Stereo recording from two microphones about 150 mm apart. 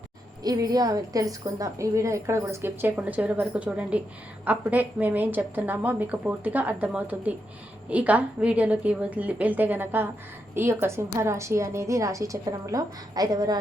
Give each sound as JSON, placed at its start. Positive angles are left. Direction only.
{"t": 0.4, "sound": "a woman's voice", "side_deg": -25}